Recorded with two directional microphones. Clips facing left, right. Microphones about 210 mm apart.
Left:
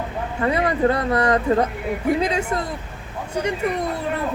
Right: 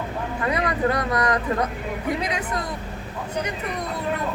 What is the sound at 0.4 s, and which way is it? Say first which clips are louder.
Speech: left 4 dB; 30° left (ahead or behind).